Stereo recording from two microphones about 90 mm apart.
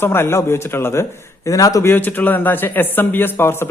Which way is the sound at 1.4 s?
40° left (ahead or behind).